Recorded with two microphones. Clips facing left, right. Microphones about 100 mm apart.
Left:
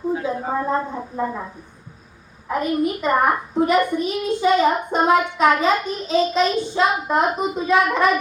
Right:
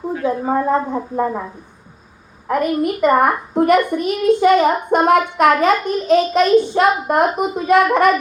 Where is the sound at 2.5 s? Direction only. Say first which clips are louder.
Right 3 dB; 55° right (ahead or behind).